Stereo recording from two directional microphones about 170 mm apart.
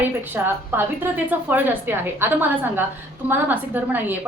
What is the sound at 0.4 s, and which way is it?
A woman's voice, 10° right (ahead or behind).